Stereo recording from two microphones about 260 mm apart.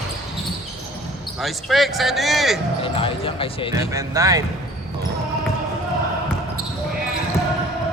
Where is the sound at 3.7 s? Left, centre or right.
Centre.